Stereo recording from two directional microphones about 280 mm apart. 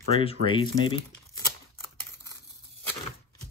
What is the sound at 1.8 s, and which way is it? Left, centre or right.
Crumpling, centre.